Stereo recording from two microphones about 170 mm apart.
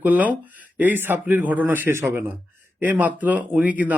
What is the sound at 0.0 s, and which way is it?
Speech, 10° right (ahead or behind).